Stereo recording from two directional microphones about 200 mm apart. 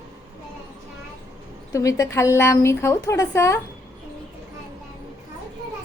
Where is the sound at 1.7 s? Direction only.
15° left (ahead or behind).